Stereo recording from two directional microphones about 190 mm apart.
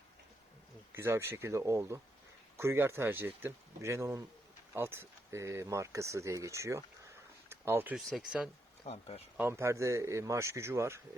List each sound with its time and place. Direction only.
0.9 s speech: 10° right (ahead or behind)
8.8 s speech: 30° left (ahead or behind)
9.4 s speech: 15° right (ahead or behind)